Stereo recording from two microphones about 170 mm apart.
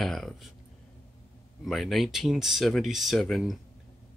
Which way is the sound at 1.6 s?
Centre (ahead or behind).